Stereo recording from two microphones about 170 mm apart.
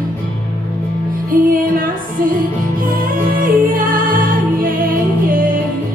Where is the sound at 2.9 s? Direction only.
55° right (ahead or behind).